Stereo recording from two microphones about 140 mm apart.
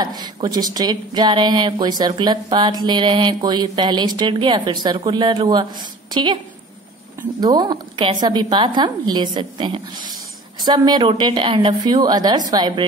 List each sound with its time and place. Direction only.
0.0 s speech: 30° right (ahead or behind)